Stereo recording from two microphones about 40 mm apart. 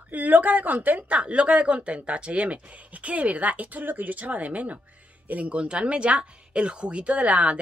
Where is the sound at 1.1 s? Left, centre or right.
Right.